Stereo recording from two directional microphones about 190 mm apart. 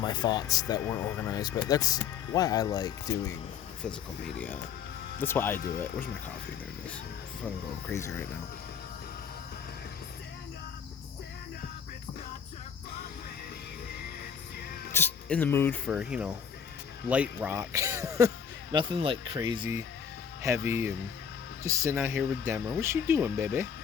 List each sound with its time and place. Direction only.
0.0 s speech: 20° left (ahead or behind)
5.2 s speech: 10° left (ahead or behind)
5.5 s speech: 50° left (ahead or behind)
5.8 s speech: 10° left (ahead or behind)
7.9 s speech: 10° left (ahead or behind)
14.9 s speech: 10° left (ahead or behind)
15.9 s speech: 5° right (ahead or behind)